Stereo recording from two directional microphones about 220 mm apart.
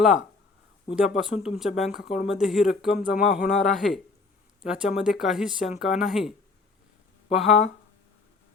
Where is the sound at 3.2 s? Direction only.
35° left (ahead or behind).